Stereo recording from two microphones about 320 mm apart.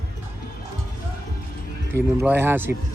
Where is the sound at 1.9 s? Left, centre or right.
Centre.